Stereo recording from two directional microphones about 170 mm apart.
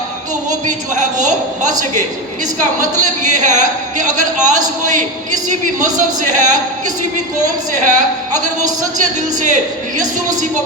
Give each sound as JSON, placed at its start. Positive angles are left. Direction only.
{"t": 0.9, "sound": "speech", "side_deg": -45}
{"t": 2.8, "sound": "speech", "side_deg": -45}